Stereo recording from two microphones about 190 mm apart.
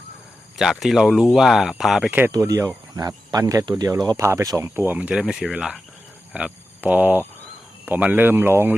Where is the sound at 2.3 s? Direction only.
20° right (ahead or behind).